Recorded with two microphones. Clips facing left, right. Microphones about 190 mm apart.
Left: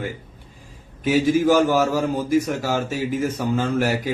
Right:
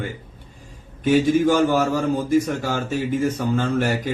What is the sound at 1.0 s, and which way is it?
Speech, 5° left (ahead or behind).